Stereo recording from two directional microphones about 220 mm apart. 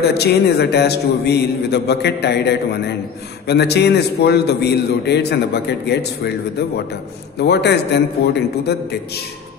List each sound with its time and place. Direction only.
0.2 s a man's voice: 50° left (ahead or behind)
7.3 s a man's voice: 50° left (ahead or behind)